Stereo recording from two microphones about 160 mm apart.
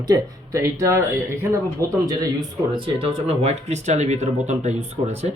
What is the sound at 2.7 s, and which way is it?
Speech, 35° right (ahead or behind).